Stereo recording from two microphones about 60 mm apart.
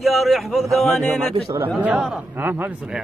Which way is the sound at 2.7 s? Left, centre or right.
Centre.